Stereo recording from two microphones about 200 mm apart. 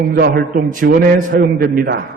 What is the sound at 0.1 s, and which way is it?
Mantra, 50° right (ahead or behind).